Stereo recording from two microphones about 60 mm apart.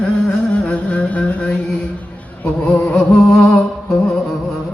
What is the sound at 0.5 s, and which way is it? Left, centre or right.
Music, left.